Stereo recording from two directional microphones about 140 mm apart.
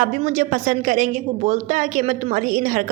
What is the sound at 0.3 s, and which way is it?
A woman's voice, 70° right (ahead or behind).